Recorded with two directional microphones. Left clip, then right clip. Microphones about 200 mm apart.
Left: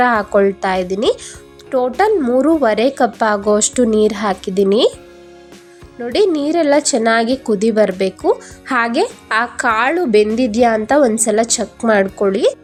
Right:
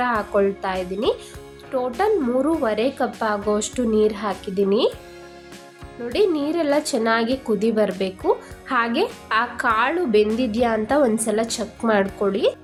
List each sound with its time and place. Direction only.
0.0 s speech: 35° left (ahead or behind)
6.0 s speech: 30° left (ahead or behind)